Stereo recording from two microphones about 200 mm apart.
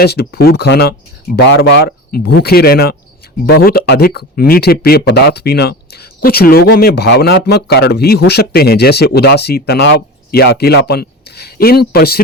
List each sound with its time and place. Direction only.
0.0 s speech: 50° left (ahead or behind)